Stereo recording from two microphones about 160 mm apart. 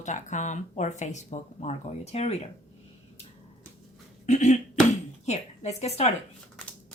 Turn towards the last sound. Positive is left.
turn(degrees=40)  # may be behind; listen again after turning